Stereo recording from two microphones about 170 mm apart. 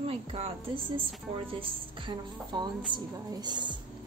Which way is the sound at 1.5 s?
30° right (ahead or behind).